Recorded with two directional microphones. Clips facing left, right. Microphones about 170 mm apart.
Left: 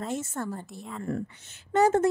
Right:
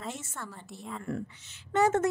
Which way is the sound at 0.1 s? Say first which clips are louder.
Left 9 dB; 40° left (ahead or behind).